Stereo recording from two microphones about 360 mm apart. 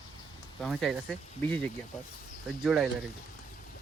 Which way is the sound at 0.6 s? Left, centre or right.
Centre.